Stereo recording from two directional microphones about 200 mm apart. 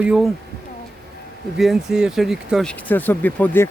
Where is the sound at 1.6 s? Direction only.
Centre (ahead or behind).